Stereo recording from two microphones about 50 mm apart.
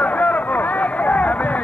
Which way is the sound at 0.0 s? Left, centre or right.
Left.